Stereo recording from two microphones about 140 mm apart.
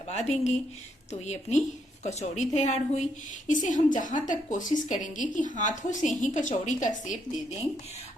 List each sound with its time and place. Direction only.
0.1 s a woman's voice: 55° left (ahead or behind)